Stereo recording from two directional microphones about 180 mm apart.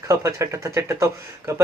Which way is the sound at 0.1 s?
15° right (ahead or behind).